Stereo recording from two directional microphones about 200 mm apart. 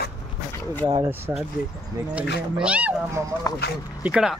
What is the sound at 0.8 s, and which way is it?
Speech, 20° right (ahead or behind).